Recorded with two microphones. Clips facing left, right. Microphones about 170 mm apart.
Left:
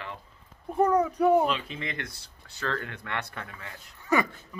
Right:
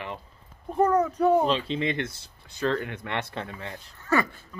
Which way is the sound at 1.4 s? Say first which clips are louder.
Right 4 dB; 30° right (ahead or behind).